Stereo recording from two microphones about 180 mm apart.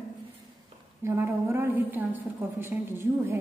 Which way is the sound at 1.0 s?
15° right (ahead or behind).